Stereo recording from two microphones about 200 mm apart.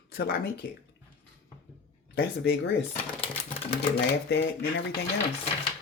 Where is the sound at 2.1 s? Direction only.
55° left (ahead or behind).